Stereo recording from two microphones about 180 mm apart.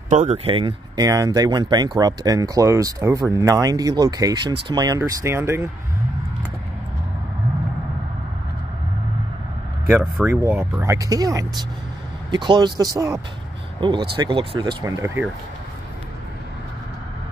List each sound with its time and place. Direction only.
0.1 s speech: 40° right (ahead or behind)
0.5 s speech: 30° right (ahead or behind)
9.8 s speech: 15° right (ahead or behind)